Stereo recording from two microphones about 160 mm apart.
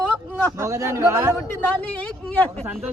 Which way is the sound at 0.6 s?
15° right (ahead or behind).